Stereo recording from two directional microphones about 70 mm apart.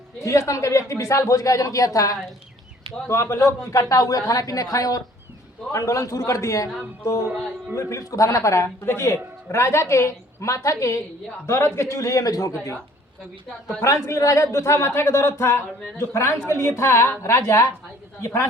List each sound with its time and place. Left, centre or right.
0.2 s a woman's voice: left
3.1 s a woman's voice: left
7.2 s speech: right
7.8 s a woman's voice: left
8.9 s a woman's voice: left
13.8 s a woman's voice: left